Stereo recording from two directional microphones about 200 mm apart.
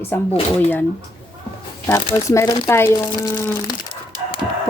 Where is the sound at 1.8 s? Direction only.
15° left (ahead or behind).